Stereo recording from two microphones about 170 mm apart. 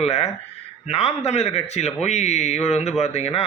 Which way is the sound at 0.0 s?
40° left (ahead or behind).